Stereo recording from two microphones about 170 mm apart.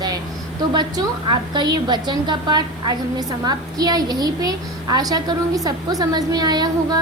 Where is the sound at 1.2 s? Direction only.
25° right (ahead or behind).